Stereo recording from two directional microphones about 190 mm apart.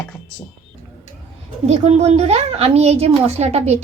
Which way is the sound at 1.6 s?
35° right (ahead or behind).